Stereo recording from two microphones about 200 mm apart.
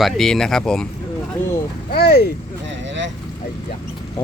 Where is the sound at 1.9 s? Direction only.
50° left (ahead or behind).